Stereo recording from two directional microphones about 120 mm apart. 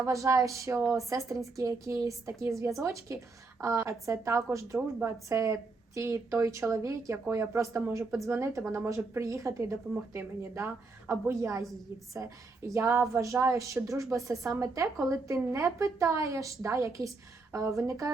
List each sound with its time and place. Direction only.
0.0 s a woman's voice: 25° right (ahead or behind)